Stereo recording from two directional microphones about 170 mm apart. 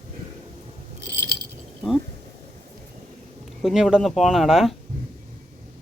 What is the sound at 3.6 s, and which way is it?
Speech, centre (ahead or behind).